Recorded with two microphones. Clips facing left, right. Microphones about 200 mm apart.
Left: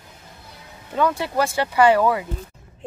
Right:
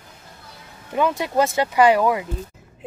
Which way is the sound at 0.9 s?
20° right (ahead or behind).